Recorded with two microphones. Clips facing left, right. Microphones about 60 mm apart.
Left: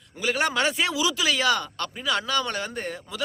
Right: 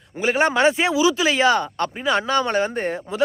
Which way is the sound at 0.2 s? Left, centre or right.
Right.